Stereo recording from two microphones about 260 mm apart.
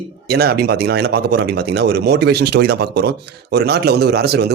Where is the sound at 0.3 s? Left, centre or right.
Right.